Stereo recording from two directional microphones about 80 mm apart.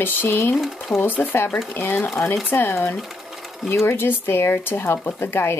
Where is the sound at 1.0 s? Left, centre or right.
Left.